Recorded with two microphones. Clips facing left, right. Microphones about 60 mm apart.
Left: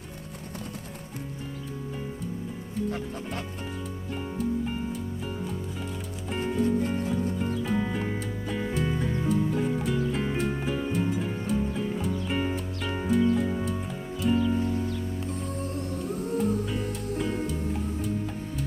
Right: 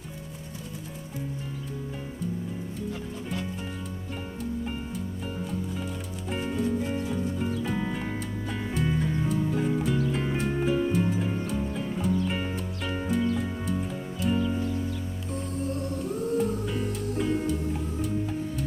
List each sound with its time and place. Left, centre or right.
5.5 s music: centre
16.4 s music: centre